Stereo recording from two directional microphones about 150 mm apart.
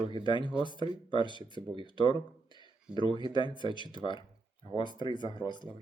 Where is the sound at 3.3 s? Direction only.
30° left (ahead or behind).